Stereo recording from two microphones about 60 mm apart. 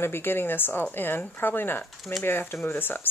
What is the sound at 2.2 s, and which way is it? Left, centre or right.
Speech, left.